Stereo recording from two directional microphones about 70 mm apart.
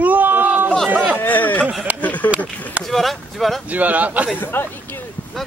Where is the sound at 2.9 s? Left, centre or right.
Centre.